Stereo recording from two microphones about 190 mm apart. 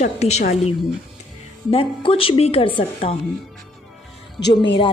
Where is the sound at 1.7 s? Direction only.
30° left (ahead or behind).